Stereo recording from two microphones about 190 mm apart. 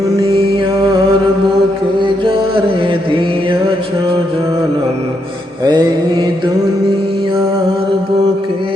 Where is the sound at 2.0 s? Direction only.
25° right (ahead or behind).